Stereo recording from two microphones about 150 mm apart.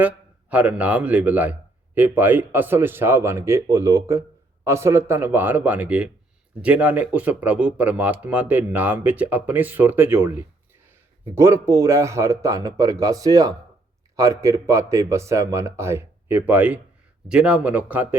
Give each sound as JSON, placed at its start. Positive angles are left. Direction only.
{"t": 0.5, "sound": "a man's voice", "side_deg": -10}